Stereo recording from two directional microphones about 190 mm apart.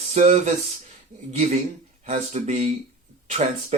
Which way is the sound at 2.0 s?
35° right (ahead or behind).